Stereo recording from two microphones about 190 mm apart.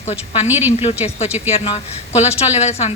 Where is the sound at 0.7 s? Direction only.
35° left (ahead or behind).